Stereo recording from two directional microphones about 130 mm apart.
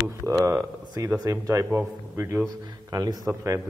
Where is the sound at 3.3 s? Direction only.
15° right (ahead or behind).